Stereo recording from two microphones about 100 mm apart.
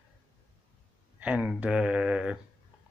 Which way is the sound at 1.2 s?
10° right (ahead or behind).